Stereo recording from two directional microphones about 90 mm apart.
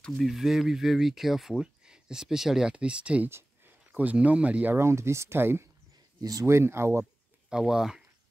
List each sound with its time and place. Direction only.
0.0 s speech: 10° left (ahead or behind)
0.3 s speech: 5° right (ahead or behind)
3.3 s a sound: 30° right (ahead or behind)
3.9 s speech: 15° right (ahead or behind)
4.7 s speech: 30° right (ahead or behind)
7.4 s speech: 5° right (ahead or behind)